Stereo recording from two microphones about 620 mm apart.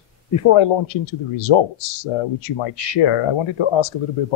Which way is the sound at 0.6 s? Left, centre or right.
Left.